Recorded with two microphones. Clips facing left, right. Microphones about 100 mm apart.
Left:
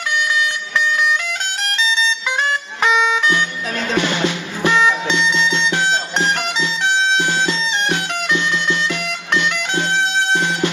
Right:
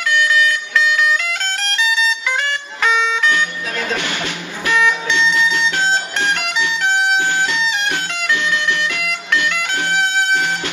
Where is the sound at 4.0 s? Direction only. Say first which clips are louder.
Left 5 dB; 20° left (ahead or behind).